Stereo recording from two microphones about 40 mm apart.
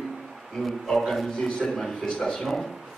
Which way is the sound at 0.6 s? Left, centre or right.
Centre.